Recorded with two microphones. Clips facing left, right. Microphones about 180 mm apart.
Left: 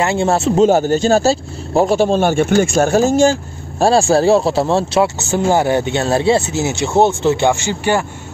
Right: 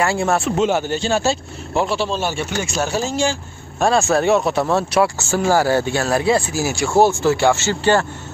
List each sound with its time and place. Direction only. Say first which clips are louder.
0.0 s speech: left 3 dB; 25° left (ahead or behind)
0.7 s speech: left 7 dB; 40° left (ahead or behind)
3.8 s speech: left 4 dB; 30° left (ahead or behind); by 8.0 s 15° left (ahead or behind)